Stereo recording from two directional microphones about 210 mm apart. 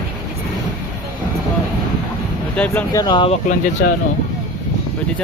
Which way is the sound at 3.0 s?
20° left (ahead or behind).